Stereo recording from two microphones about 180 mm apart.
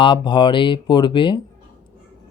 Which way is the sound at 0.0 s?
25° left (ahead or behind).